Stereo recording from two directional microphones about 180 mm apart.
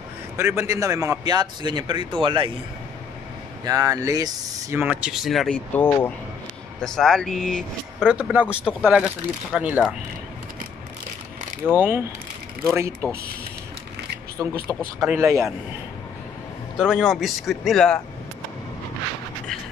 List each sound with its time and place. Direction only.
0.4 s speech: 15° right (ahead or behind)
3.6 s speech: 20° right (ahead or behind)
11.7 s speech: 10° right (ahead or behind)
14.4 s speech: 15° right (ahead or behind)
16.7 s speech: centre (ahead or behind)